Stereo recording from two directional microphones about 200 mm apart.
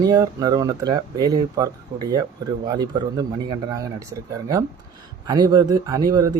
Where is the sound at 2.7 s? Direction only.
20° right (ahead or behind).